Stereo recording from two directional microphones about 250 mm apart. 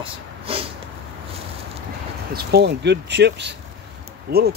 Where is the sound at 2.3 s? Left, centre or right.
Right.